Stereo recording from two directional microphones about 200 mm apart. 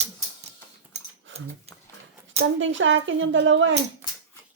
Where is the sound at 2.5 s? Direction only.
70° right (ahead or behind).